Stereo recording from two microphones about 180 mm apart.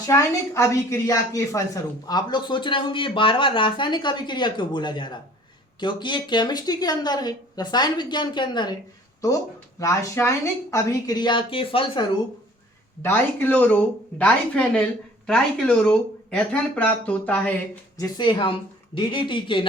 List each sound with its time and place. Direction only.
0.0 s a woman's voice: 15° left (ahead or behind)
9.8 s a woman's voice: 15° left (ahead or behind)
13.0 s speech: 10° left (ahead or behind)
17.9 s a woman's voice: 20° left (ahead or behind)